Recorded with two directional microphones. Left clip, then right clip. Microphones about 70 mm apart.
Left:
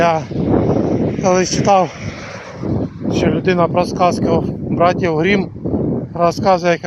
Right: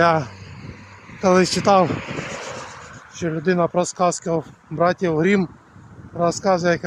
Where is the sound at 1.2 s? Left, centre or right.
Right.